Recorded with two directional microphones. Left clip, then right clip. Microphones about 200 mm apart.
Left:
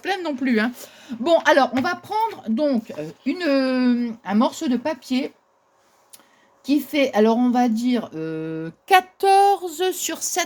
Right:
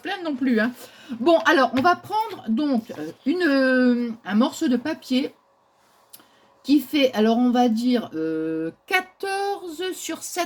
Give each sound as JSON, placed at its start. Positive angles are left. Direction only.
{"t": 0.0, "sound": "speech", "side_deg": 65}
{"t": 6.7, "sound": "speech", "side_deg": 45}